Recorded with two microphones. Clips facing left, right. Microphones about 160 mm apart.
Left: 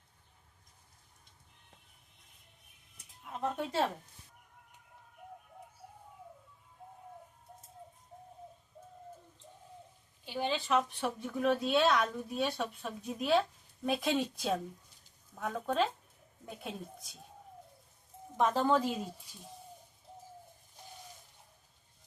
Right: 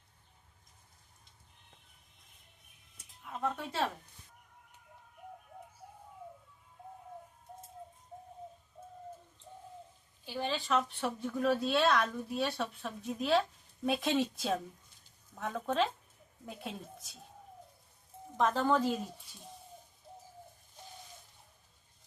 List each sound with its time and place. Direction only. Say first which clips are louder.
3.2 s speech: even; 15° left (ahead or behind)
10.2 s speech: left 1 dB; 20° left (ahead or behind); by 17.2 s centre (ahead or behind)
18.3 s speech: left 1 dB; 15° left (ahead or behind)